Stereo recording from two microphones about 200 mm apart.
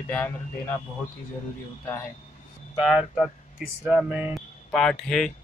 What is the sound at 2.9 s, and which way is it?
Speech, centre (ahead or behind).